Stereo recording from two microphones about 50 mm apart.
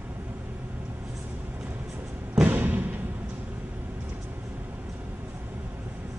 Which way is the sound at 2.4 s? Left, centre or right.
Right.